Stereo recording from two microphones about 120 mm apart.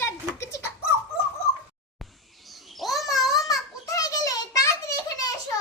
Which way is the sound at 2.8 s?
Centre (ahead or behind).